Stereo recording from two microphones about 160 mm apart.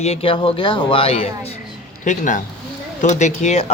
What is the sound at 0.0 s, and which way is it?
Speech, 40° left (ahead or behind).